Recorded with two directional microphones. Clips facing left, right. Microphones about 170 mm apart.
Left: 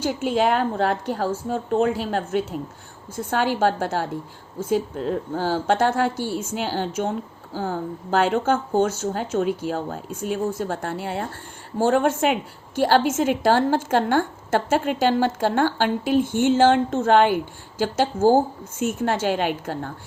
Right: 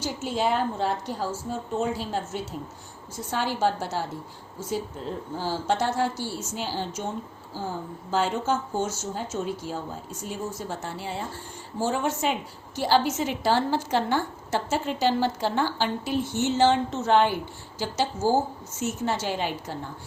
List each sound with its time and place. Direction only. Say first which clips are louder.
0.0 s a woman's voice: left 6 dB; 55° left (ahead or behind)